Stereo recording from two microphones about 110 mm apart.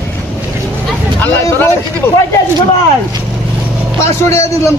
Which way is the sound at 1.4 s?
25° left (ahead or behind).